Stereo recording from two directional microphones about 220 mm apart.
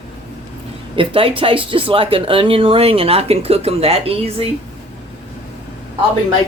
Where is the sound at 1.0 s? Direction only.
25° right (ahead or behind).